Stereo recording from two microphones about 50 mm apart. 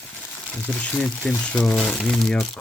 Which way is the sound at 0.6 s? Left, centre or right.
Left.